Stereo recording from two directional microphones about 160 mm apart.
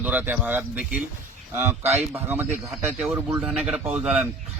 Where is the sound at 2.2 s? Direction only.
10° right (ahead or behind).